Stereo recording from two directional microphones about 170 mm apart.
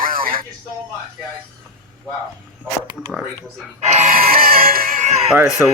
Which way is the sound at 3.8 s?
40° right (ahead or behind).